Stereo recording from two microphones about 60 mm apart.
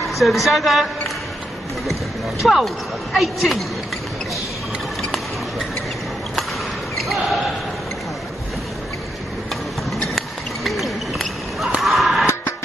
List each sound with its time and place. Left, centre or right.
0.1 s a woman's voice: centre
2.4 s a woman's voice: centre
7.0 s basketball bounce: centre
10.0 s a sound: centre